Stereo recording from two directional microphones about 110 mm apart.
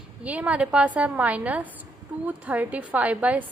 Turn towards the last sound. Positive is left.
turn(degrees=-15)  # may be behind; listen again after turning